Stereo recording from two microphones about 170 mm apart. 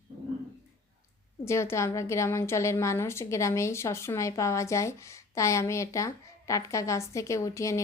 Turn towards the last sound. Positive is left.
turn(degrees=20)  # may be behind; listen again after turning